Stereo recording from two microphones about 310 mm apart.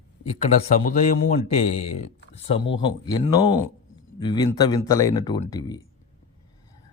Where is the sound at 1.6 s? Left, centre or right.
Left.